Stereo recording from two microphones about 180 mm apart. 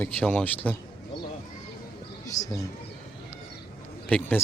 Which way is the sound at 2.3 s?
20° left (ahead or behind).